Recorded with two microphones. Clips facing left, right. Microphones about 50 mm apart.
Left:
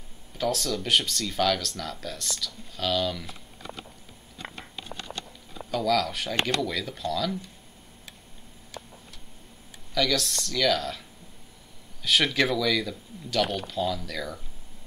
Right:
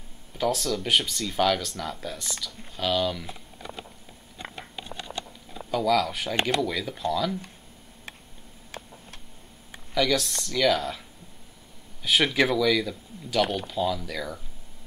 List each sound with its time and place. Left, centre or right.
0.4 s speech: centre
4.4 s a sound: centre
5.7 s speech: centre
8.7 s tick-tock: right
9.9 s speech: centre
12.0 s speech: centre